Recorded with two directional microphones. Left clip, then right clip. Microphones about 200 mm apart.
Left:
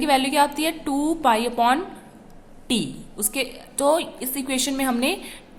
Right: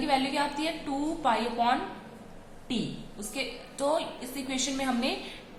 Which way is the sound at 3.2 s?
55° left (ahead or behind).